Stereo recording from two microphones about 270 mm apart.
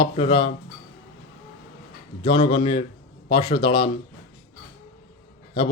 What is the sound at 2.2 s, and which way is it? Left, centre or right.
A man's voice, centre.